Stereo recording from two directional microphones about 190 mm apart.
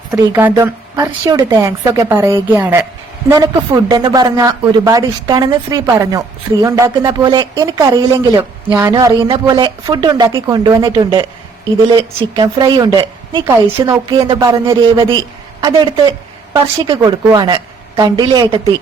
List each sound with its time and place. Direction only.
0.1 s a woman's voice: 15° right (ahead or behind)